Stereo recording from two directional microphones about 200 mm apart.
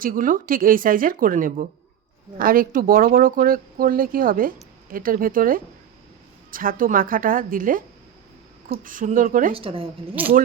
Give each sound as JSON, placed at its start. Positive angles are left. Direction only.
{"t": 0.0, "sound": "speech", "side_deg": -45}
{"t": 9.5, "sound": "a woman's voice", "side_deg": -25}
{"t": 10.2, "sound": "speech", "side_deg": -10}